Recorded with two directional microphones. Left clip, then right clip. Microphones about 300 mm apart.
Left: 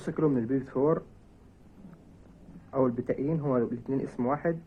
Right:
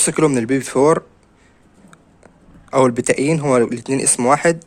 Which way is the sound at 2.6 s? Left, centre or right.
Right.